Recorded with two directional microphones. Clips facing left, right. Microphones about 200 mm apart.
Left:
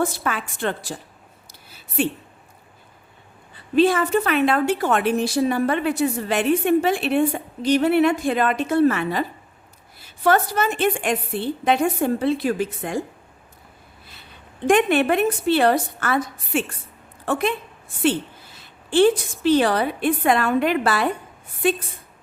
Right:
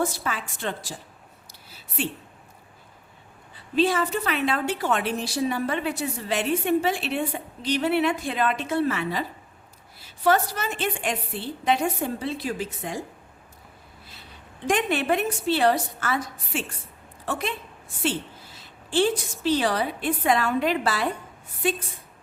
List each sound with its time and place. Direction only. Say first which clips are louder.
0.0 s a woman's voice: left 4 dB; 60° left (ahead or behind)
2.0 s a woman's voice: left 7 dB; 50° left (ahead or behind)
3.8 s a woman's voice: left 5 dB; 55° left (ahead or behind)
14.7 s a woman's voice: left 6 dB; 60° left (ahead or behind)
18.5 s a woman's voice: left 5 dB; 55° left (ahead or behind)